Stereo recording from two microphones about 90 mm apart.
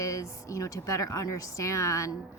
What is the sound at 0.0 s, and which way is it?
A woman's voice, 35° left (ahead or behind).